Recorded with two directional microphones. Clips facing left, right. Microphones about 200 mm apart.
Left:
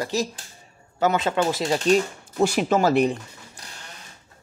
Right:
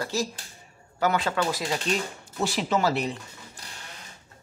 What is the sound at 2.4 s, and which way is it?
Speech, 50° left (ahead or behind).